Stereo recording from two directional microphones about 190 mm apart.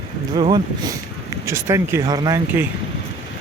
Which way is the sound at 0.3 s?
25° right (ahead or behind).